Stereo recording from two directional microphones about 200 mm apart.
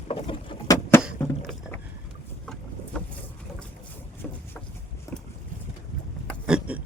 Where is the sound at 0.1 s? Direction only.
25° left (ahead or behind).